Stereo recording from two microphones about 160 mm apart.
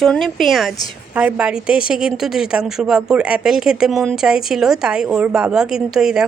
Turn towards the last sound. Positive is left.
turn(degrees=-5)  # may be behind; listen again after turning